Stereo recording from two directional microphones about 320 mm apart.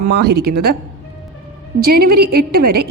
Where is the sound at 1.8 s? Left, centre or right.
Right.